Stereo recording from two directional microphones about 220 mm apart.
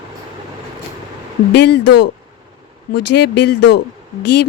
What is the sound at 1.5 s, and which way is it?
Speech, 50° left (ahead or behind).